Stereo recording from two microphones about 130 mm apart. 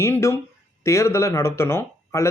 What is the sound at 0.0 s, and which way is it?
Speech, 20° left (ahead or behind).